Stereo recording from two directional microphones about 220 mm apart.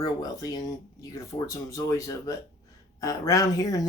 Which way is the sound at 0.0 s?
15° left (ahead or behind).